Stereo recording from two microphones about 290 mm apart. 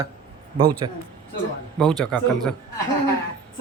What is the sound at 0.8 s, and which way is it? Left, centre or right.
Speech, centre.